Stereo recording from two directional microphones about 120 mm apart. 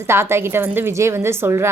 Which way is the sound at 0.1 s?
20° right (ahead or behind).